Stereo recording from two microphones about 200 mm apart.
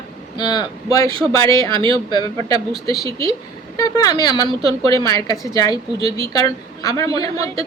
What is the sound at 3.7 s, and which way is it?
A woman's voice, 20° left (ahead or behind).